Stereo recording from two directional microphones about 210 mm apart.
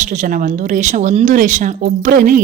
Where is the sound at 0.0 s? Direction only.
35° right (ahead or behind).